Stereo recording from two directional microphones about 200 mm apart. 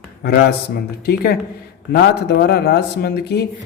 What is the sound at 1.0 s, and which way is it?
A man's voice, 50° left (ahead or behind).